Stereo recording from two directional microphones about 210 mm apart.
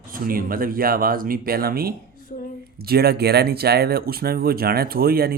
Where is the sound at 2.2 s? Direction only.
40° left (ahead or behind).